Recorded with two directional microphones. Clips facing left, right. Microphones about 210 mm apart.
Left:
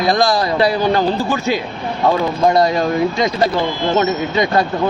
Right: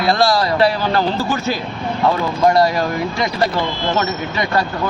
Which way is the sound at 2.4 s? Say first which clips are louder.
Even; 20° left (ahead or behind).